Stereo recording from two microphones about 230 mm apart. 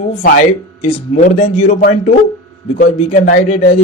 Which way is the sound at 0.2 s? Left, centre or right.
Left.